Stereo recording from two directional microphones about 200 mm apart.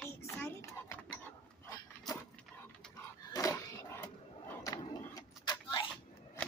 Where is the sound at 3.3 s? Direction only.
15° left (ahead or behind).